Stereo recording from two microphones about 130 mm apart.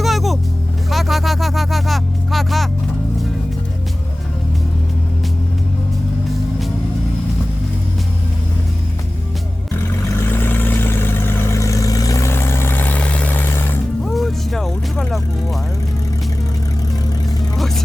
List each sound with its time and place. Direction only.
0.0 s music: centre (ahead or behind)
0.9 s a sound: centre (ahead or behind)
10.2 s vehicle: 15° left (ahead or behind)
14.0 s music: centre (ahead or behind)